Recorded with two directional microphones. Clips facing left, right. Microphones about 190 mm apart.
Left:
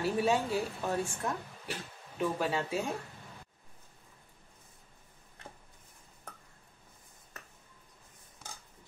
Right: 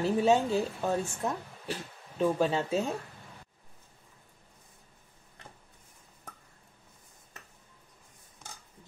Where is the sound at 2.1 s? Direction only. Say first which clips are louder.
Right 5 dB; 25° right (ahead or behind).